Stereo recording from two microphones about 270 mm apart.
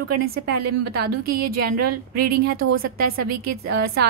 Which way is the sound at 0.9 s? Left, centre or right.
Right.